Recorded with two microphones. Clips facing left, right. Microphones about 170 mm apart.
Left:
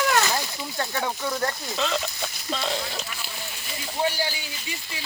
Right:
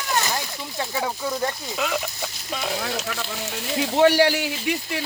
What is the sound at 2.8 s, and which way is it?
Speech, 80° right.